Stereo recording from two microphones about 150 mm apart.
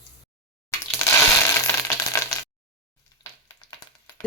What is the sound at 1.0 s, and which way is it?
Crushing, 15° left (ahead or behind).